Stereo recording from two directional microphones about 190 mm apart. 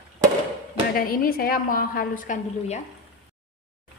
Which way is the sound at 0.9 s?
50° left (ahead or behind).